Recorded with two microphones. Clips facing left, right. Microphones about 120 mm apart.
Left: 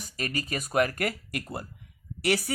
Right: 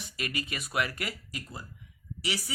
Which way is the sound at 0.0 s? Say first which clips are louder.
Left 3 dB; 40° left (ahead or behind).